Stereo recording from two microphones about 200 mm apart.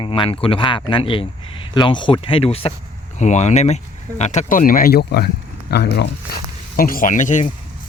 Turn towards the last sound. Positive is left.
turn(degrees=40)  # may be behind; listen again after turning